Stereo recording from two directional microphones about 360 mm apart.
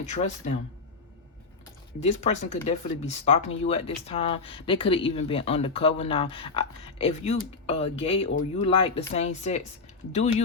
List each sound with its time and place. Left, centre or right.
0.0 s speech: centre
2.0 s speech: centre